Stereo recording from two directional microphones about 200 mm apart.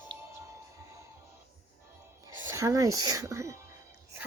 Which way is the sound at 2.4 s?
15° right (ahead or behind).